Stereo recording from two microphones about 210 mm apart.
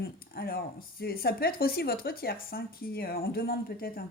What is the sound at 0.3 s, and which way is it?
Speech, 45° left (ahead or behind).